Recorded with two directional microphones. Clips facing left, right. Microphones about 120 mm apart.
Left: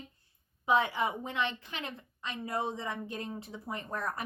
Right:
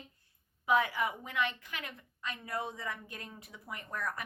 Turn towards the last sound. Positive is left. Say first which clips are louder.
# left 3 dB
turn(degrees=30)  # may be behind; listen again after turning